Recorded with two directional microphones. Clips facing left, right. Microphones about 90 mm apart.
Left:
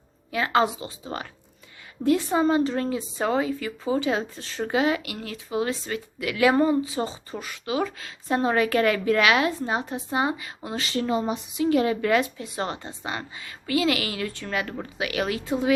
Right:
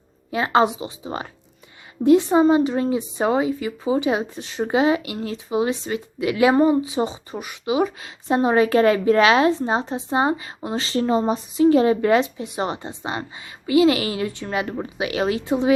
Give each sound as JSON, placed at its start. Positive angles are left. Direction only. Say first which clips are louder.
{"t": 0.3, "sound": "a woman's voice", "louder": "right 4 dB", "side_deg": -25}